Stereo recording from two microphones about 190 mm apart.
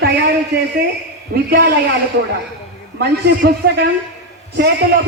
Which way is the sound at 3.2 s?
60° right (ahead or behind).